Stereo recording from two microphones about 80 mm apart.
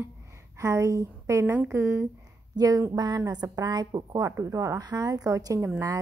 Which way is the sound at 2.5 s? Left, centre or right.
Right.